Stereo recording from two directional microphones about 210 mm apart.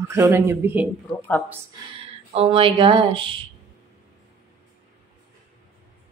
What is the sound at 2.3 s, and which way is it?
Speech, 25° right (ahead or behind).